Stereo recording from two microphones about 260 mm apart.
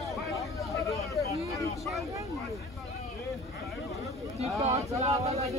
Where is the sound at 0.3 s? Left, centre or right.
Centre.